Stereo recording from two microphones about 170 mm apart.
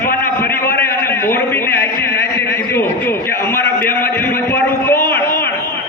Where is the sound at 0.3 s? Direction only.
15° left (ahead or behind).